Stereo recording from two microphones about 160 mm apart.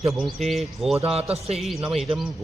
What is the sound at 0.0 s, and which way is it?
Speech, centre (ahead or behind).